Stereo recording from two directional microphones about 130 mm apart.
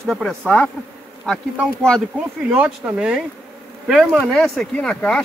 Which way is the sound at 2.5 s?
10° right (ahead or behind).